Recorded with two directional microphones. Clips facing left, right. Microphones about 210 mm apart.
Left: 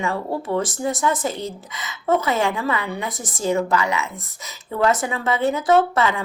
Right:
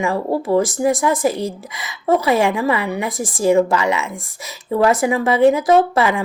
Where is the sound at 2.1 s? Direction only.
15° right (ahead or behind).